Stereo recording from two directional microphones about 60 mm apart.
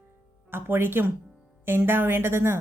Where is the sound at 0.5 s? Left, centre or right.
Right.